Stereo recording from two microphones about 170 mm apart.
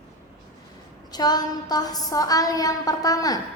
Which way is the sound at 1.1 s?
25° left (ahead or behind).